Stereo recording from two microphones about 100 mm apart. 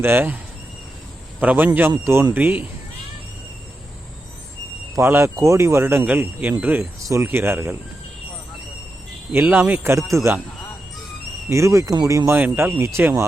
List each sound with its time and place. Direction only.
0.0 s speech: 20° right (ahead or behind)
1.4 s speech: 15° right (ahead or behind)
4.9 s speech: 25° right (ahead or behind)
7.0 s speech: 30° right (ahead or behind)
9.3 s speech: 20° right (ahead or behind)
10.1 s speech: 30° right (ahead or behind)
11.4 s speech: 30° right (ahead or behind)
12.4 s speech: 20° right (ahead or behind)